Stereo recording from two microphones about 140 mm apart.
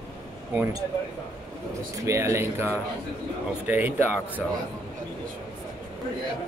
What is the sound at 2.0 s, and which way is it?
Speech, 20° right (ahead or behind).